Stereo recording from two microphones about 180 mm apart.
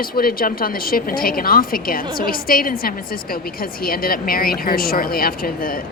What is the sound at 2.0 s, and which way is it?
Speech, 25° right (ahead or behind).